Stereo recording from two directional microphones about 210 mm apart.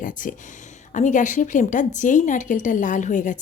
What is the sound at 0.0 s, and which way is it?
Speech, 40° left (ahead or behind).